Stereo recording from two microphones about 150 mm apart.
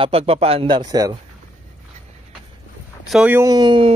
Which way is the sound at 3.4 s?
25° right (ahead or behind).